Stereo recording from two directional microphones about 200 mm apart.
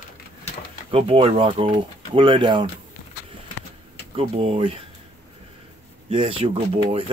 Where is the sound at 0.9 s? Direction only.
25° right (ahead or behind).